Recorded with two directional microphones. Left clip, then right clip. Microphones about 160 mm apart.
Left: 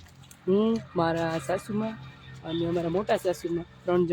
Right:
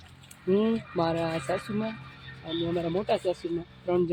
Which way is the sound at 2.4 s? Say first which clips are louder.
Left 1 dB; 30° left (ahead or behind).